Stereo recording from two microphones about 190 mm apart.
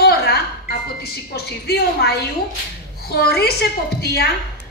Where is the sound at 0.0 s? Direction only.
55° left (ahead or behind).